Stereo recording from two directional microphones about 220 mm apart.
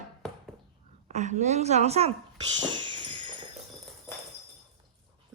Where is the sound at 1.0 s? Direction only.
30° right (ahead or behind).